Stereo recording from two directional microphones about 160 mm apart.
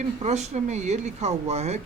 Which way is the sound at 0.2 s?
45° right (ahead or behind).